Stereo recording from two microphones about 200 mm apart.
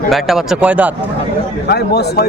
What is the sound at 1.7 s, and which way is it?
Speech, 55° left (ahead or behind).